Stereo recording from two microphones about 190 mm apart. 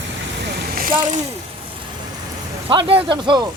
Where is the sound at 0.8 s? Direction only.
45° right (ahead or behind).